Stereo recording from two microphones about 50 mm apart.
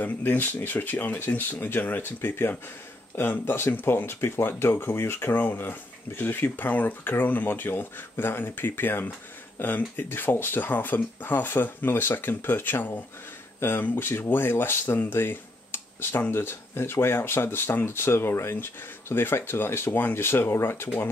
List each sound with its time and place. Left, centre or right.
0.0 s speech: left
5.3 s speech: left
20.2 s speech: left